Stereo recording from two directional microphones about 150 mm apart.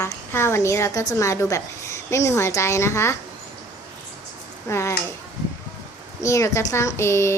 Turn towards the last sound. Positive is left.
turn(degrees=20)  # may be behind; listen again after turning